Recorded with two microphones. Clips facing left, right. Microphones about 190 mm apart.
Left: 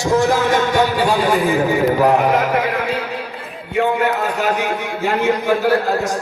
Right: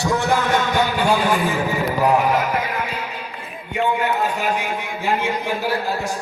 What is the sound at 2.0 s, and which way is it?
Speech, 60° left (ahead or behind).